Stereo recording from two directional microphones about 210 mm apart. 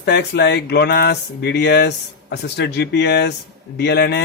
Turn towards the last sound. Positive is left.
turn(degrees=50)  # may be behind; listen again after turning